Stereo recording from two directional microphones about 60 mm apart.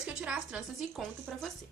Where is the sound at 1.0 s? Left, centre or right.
Centre.